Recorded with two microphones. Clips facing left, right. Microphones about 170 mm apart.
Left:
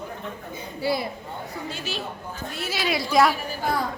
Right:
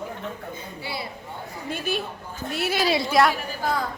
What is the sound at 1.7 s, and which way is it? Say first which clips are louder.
Speech: right 5 dB; 55° right (ahead or behind).